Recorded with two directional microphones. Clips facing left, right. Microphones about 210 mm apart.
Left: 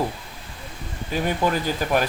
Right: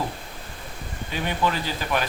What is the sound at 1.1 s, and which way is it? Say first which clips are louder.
Speech: left 3 dB; 45° left (ahead or behind).